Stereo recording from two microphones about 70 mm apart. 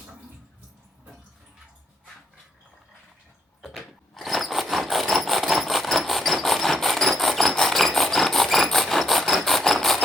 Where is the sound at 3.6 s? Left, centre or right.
Centre.